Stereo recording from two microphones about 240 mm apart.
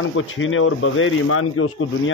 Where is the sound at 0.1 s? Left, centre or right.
Left.